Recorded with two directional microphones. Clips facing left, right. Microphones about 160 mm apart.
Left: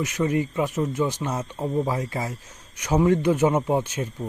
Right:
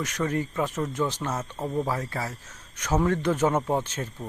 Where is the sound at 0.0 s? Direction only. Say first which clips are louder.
Left 4 dB; 10° left (ahead or behind).